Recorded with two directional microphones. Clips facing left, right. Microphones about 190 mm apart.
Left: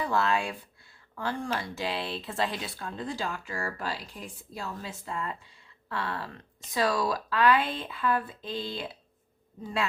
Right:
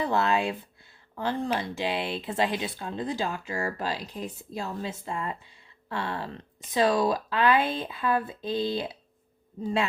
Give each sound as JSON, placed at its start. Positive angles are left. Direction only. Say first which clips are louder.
{"t": 0.0, "sound": "speech", "louder": "right 2 dB", "side_deg": -20}